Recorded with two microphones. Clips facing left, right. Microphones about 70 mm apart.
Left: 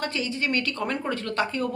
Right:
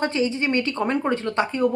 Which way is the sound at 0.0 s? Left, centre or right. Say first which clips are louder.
Right 6 dB; right.